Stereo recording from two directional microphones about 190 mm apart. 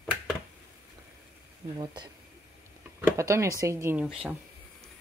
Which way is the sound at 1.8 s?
25° right (ahead or behind).